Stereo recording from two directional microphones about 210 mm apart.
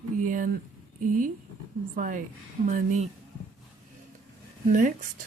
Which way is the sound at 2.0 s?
40° right (ahead or behind).